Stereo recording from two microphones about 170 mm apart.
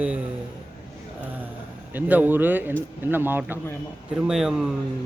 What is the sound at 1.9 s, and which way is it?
Speech, 10° right (ahead or behind).